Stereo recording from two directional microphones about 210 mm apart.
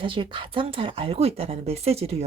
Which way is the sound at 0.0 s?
25° right (ahead or behind).